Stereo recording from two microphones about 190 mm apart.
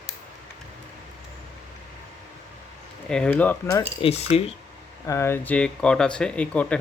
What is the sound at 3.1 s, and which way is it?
Speech, 5° left (ahead or behind).